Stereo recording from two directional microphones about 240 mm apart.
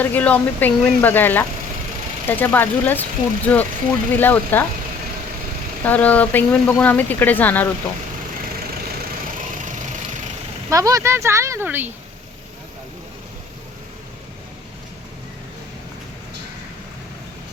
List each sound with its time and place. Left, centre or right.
0.0 s speech: centre
5.8 s speech: centre
9.6 s engine: right
10.7 s speech: centre